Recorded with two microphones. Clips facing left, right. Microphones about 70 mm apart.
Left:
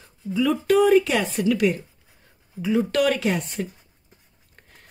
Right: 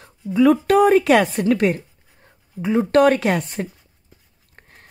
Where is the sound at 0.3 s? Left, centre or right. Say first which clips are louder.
Right 5 dB; right.